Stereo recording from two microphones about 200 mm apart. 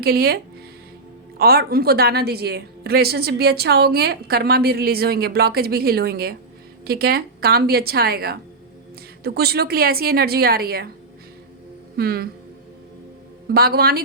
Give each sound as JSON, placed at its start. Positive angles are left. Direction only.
{"t": 0.0, "sound": "a woman's voice", "side_deg": -50}
{"t": 1.4, "sound": "a woman's voice", "side_deg": -50}
{"t": 11.9, "sound": "a woman's voice", "side_deg": -50}
{"t": 13.5, "sound": "a woman's voice", "side_deg": -50}